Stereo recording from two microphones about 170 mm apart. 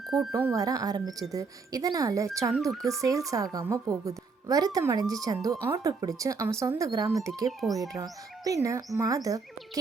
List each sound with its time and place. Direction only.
0.3 s a woman's voice: 15° right (ahead or behind)
2.7 s speech: centre (ahead or behind)
3.0 s a woman's voice: 20° right (ahead or behind)